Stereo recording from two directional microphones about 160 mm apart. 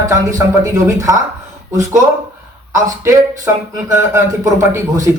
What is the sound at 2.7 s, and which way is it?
Speech, 20° right (ahead or behind).